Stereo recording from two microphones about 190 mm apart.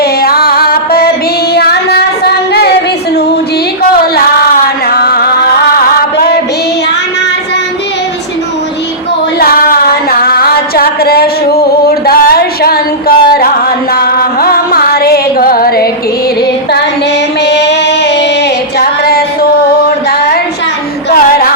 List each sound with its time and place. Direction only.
0.0 s music: 55° left (ahead or behind)
1.5 s child singing: 60° left (ahead or behind)
4.9 s music: 55° left (ahead or behind)
9.4 s singing: 50° left (ahead or behind)
11.9 s a sound: 55° left (ahead or behind)
13.9 s music: 50° left (ahead or behind)
17.4 s music: 65° left (ahead or behind)
18.8 s female singing: 55° left (ahead or behind)
21.1 s music: 55° left (ahead or behind)